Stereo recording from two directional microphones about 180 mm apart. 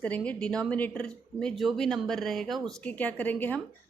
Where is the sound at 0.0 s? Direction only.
5° left (ahead or behind).